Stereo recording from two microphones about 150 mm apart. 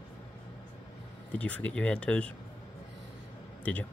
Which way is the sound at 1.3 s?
10° left (ahead or behind).